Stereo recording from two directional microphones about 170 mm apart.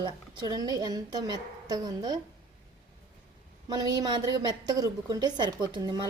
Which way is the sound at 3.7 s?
25° right (ahead or behind).